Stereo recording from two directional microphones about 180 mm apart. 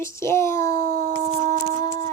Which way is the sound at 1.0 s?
45° right (ahead or behind).